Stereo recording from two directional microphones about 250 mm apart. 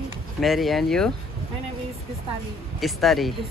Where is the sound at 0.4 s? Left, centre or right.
Centre.